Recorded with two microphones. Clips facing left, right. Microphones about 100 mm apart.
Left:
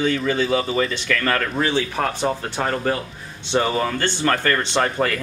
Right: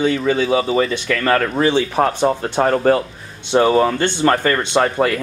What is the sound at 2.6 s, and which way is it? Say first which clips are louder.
Speech: right 9 dB; 40° right (ahead or behind).